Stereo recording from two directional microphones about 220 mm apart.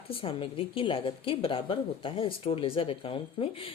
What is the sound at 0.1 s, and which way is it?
A woman's voice, 25° left (ahead or behind).